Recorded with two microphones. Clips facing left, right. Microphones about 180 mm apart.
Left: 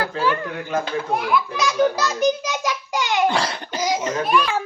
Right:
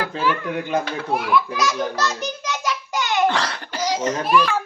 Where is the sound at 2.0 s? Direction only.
10° left (ahead or behind).